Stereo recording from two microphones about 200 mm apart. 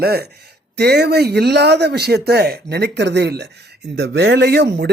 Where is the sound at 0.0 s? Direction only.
50° right (ahead or behind).